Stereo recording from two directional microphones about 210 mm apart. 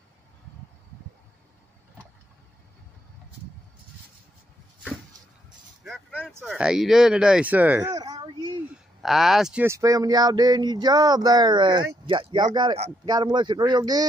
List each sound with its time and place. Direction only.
5.9 s speech: centre (ahead or behind); by 8.3 s 20° right (ahead or behind)
9.0 s speech: centre (ahead or behind); by 14.0 s 20° right (ahead or behind)